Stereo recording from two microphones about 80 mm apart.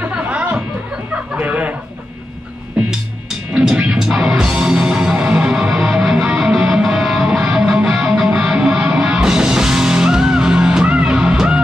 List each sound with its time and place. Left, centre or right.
0.0 s music: centre
1.3 s a sound: centre
3.5 s music: centre